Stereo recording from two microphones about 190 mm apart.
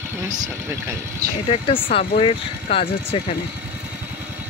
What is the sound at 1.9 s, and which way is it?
Speech, 30° left (ahead or behind).